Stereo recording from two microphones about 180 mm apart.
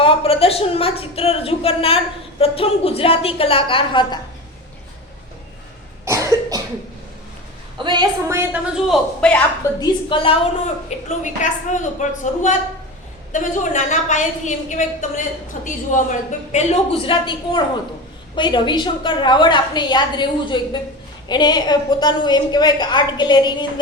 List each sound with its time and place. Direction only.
0.0 s a woman's voice: 30° left (ahead or behind)
6.1 s cough: 15° right (ahead or behind)
7.8 s a woman's voice: 25° right (ahead or behind)
8.7 s a man's voice: centre (ahead or behind)
9.8 s a woman's voice: 25° left (ahead or behind)
10.8 s a woman's voice: 45° left (ahead or behind); by 23.8 s 25° left (ahead or behind)